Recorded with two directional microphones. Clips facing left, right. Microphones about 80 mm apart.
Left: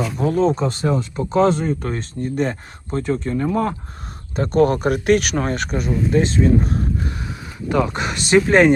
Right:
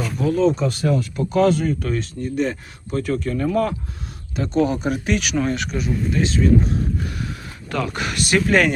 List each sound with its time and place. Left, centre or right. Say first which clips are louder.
0.2 s speech: even; left
4.4 s speech: left 4 dB; left
7.7 s speech: left 5 dB; left